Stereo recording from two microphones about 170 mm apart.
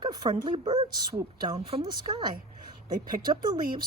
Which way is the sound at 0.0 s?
25° right (ahead or behind).